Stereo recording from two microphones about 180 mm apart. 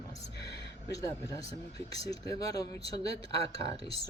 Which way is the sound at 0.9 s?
20° left (ahead or behind).